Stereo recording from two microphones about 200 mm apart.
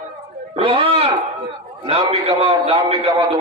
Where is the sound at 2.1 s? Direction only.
30° right (ahead or behind).